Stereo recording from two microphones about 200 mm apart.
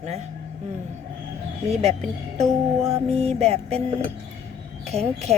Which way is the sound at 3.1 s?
30° right (ahead or behind).